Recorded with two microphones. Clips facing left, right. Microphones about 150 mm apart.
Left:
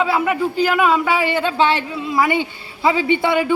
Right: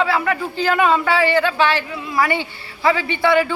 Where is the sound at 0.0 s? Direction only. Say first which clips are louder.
Left 2 dB; 15° left (ahead or behind).